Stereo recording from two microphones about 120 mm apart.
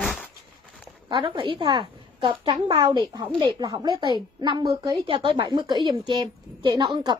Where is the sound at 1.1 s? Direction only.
45° right (ahead or behind).